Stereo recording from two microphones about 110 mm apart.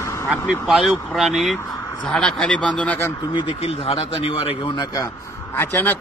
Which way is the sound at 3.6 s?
60° left (ahead or behind).